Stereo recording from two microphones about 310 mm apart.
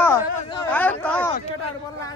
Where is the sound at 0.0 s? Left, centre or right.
Centre.